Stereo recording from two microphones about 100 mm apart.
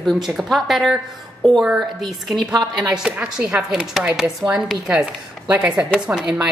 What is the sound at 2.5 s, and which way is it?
Speech, 40° right (ahead or behind).